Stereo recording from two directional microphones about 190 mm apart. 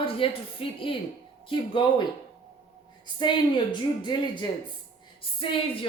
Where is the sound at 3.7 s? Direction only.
25° left (ahead or behind).